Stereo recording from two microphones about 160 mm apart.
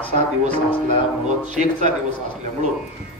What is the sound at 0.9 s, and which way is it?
A man's voice, 50° right (ahead or behind).